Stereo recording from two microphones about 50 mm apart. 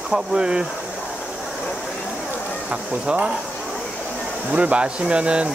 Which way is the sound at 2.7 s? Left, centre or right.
Right.